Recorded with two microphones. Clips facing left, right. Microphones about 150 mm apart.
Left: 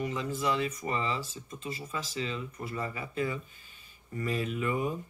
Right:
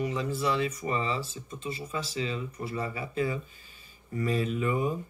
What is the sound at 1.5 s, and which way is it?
Speech, 35° right (ahead or behind).